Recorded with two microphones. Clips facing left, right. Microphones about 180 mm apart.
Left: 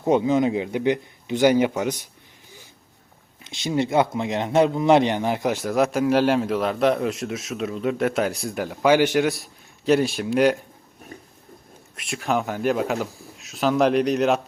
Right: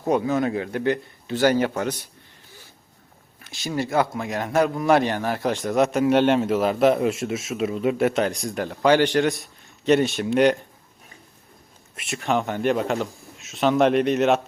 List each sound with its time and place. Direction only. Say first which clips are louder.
0.0 s a man's voice: left 3 dB; 20° left (ahead or behind)
3.4 s speech: left 3 dB; 20° left (ahead or behind)
5.6 s a man's voice: right 2 dB; centre (ahead or behind)
11.9 s a man's voice: even; centre (ahead or behind)